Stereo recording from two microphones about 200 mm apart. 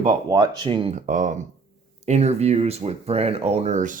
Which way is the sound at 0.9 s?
40° right (ahead or behind).